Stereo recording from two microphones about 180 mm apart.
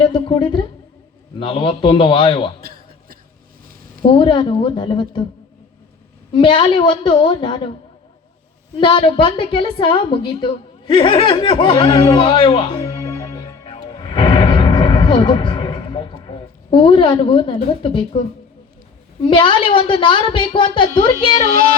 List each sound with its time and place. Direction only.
0.0 s a woman's voice: 30° left (ahead or behind)
2.6 s a sound: 55° right (ahead or behind)
4.0 s a woman's voice: 30° left (ahead or behind)
6.3 s a woman's voice: 25° left (ahead or behind)
8.8 s a woman's voice: 25° left (ahead or behind)
13.7 s music: 30° left (ahead or behind)
19.2 s a woman's voice: 25° left (ahead or behind)